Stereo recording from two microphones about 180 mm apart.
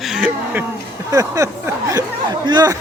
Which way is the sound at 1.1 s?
20° right (ahead or behind).